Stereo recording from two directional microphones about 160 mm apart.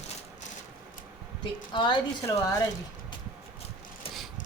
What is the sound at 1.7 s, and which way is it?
Speech, 30° left (ahead or behind).